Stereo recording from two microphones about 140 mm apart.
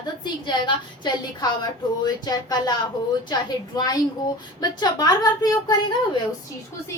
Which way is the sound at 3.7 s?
25° left (ahead or behind).